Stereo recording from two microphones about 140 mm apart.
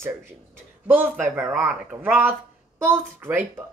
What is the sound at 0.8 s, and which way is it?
Speech, 10° right (ahead or behind).